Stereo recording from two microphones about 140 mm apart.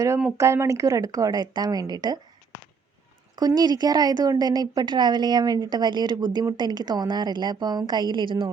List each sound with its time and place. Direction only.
0.3 s speech: 20° right (ahead or behind)
3.3 s speech: 30° right (ahead or behind)